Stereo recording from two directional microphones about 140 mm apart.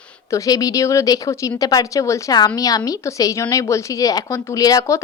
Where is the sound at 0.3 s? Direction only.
25° left (ahead or behind).